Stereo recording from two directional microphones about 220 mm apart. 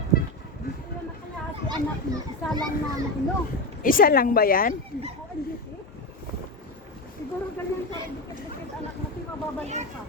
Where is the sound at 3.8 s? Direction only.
40° left (ahead or behind).